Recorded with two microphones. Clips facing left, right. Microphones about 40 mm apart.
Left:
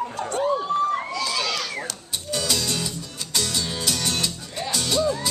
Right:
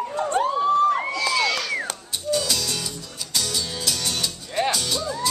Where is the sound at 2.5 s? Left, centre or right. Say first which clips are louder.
Left 1 dB; centre.